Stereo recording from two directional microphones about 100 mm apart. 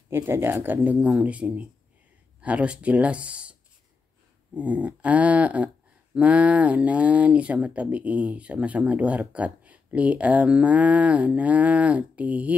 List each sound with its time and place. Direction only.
0.1 s speech: 20° right (ahead or behind)
4.6 s speech: 10° right (ahead or behind)